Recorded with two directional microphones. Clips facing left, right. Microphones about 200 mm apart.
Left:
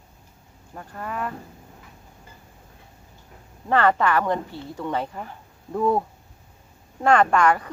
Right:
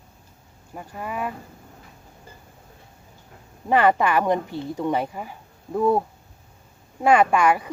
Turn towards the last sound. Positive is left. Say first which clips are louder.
# even
turn(degrees=-10)  # may be behind; listen again after turning